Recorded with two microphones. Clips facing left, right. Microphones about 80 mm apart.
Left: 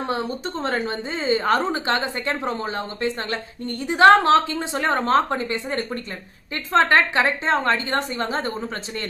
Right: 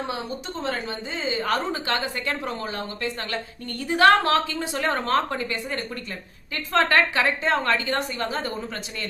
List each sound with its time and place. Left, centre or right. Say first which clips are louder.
0.6 s a woman's voice: left 4 dB; left
6.7 s a woman's voice: left 3 dB; left